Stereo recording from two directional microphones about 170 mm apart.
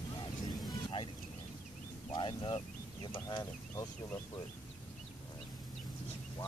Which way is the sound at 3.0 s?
25° left (ahead or behind).